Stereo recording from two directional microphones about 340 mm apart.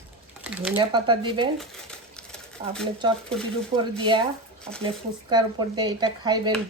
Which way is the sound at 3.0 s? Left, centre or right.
Centre.